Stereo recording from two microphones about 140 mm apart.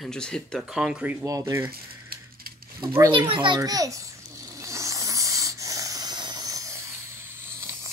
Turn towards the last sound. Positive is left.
turn(degrees=-15)  # may be behind; listen again after turning